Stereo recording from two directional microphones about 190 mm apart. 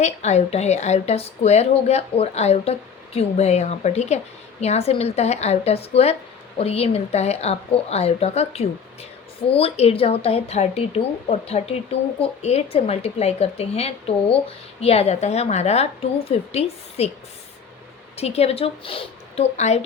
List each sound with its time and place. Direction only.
0.0 s a woman's voice: 35° left (ahead or behind)
18.2 s a woman's voice: 30° left (ahead or behind)